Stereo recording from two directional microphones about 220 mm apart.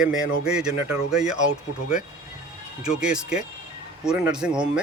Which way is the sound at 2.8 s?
5° right (ahead or behind).